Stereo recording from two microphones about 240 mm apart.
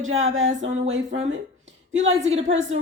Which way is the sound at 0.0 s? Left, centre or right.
Right.